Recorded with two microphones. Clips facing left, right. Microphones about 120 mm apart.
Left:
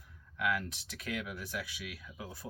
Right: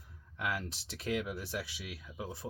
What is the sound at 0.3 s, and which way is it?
Speech, 30° right (ahead or behind).